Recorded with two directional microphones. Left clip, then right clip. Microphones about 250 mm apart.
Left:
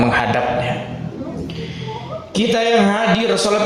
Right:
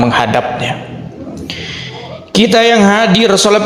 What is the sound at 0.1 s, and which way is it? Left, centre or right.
Speech, right.